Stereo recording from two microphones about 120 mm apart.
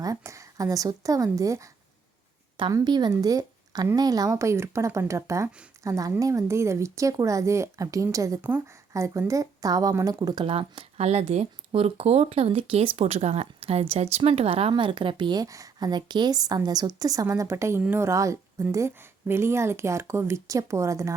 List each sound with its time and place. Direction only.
0.0 s a woman's voice: 25° right (ahead or behind)
2.7 s a woman's voice: 35° right (ahead or behind)
8.4 s a woman's voice: 15° right (ahead or behind)
8.9 s a woman's voice: 25° right (ahead or behind)
10.4 s speech: 50° right (ahead or behind)
14.7 s a woman's voice: 40° right (ahead or behind); by 21.2 s 25° right (ahead or behind)